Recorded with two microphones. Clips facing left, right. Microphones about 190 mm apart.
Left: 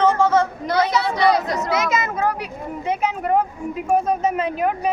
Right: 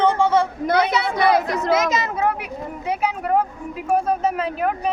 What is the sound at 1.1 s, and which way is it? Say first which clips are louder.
Speech: right 1 dB; 55° right (ahead or behind).